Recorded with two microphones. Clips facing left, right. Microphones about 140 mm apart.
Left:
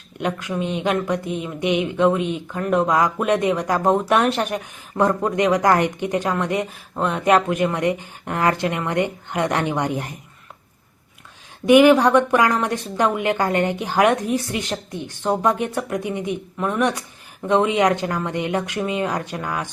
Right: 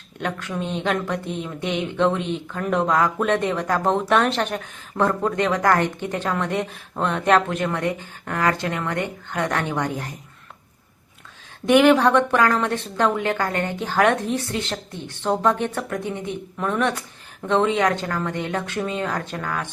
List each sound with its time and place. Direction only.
0.2 s a woman's voice: 10° left (ahead or behind)
11.6 s a woman's voice: 10° left (ahead or behind)